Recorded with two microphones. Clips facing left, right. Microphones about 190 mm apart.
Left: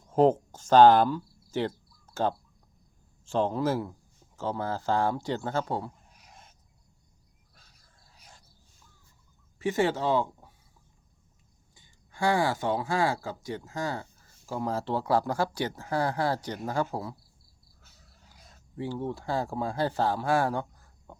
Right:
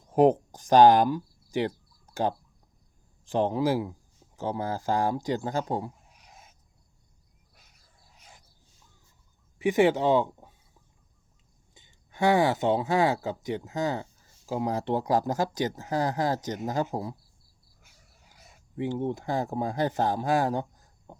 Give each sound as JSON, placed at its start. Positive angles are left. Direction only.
{"t": 0.1, "sound": "speech", "side_deg": -15}
{"t": 3.2, "sound": "speech", "side_deg": -15}
{"t": 6.0, "sound": "a sound", "side_deg": -5}
{"t": 7.5, "sound": "wild animals", "side_deg": -15}
{"t": 9.6, "sound": "speech", "side_deg": -15}
{"t": 11.7, "sound": "speech", "side_deg": -20}
{"t": 17.7, "sound": "dog", "side_deg": -10}
{"t": 18.8, "sound": "speech", "side_deg": -20}